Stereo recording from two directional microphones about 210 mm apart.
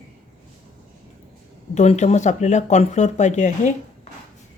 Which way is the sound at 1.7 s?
35° left (ahead or behind).